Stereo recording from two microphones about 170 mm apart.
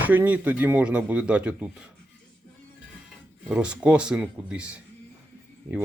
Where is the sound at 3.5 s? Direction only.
5° right (ahead or behind).